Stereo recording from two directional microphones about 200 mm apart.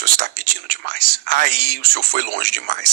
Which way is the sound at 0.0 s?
45° right (ahead or behind).